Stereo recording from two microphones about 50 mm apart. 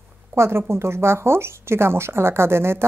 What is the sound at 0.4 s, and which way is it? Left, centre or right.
A woman's voice, right.